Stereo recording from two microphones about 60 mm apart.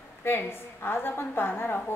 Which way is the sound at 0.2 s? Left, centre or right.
Left.